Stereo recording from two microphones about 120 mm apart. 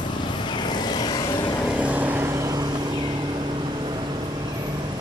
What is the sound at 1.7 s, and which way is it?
Vehicle, 10° right (ahead or behind).